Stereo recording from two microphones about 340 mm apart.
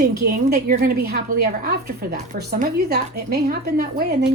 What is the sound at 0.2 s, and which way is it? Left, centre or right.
A woman's voice, right.